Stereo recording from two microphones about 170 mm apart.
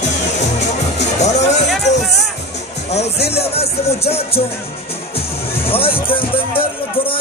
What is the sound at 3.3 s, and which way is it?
Speech, 35° left (ahead or behind).